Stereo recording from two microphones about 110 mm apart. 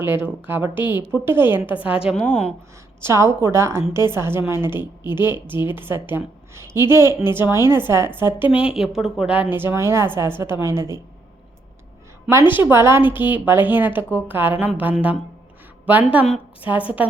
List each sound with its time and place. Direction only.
0.0 s a woman's voice: 20° right (ahead or behind)
3.0 s a woman's voice: 25° right (ahead or behind)
12.3 s a woman's voice: 20° right (ahead or behind)